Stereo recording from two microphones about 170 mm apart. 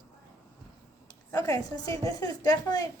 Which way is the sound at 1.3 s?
20° left (ahead or behind).